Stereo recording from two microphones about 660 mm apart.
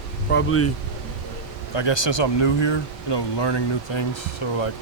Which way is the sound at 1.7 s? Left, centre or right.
Left.